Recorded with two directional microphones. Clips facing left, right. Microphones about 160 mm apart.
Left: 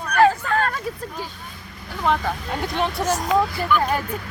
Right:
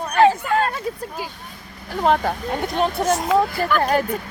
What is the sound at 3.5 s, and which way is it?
Speech, 45° right (ahead or behind).